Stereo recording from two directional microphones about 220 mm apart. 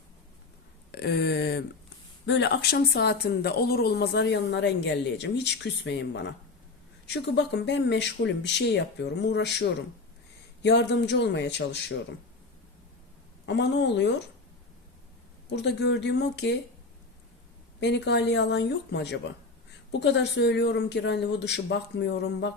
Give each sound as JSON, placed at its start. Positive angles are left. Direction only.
{"t": 0.9, "sound": "a woman's voice", "side_deg": 50}
{"t": 13.4, "sound": "a woman's voice", "side_deg": 50}
{"t": 15.4, "sound": "a woman's voice", "side_deg": 50}
{"t": 17.7, "sound": "a woman's voice", "side_deg": 50}